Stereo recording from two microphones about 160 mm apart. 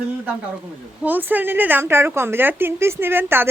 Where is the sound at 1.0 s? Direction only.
10° right (ahead or behind).